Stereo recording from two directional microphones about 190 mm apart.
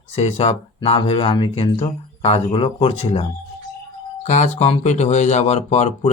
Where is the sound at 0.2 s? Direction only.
30° left (ahead or behind).